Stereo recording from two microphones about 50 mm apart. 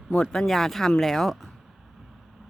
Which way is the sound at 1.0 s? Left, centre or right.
Centre.